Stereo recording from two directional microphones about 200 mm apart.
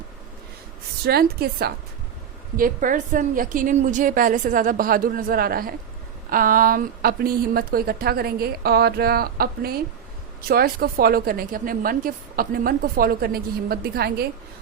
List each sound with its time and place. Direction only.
1.0 s a woman's voice: 50° right (ahead or behind)